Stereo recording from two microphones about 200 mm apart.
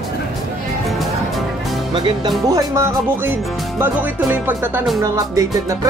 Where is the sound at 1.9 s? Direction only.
25° right (ahead or behind).